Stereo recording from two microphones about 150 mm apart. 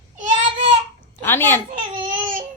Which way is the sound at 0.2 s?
50° right (ahead or behind).